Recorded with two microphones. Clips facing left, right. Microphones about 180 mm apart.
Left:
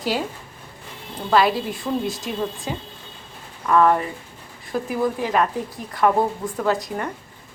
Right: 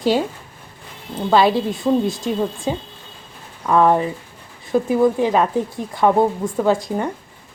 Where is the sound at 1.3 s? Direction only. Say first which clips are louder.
Right 3 dB; 25° right (ahead or behind).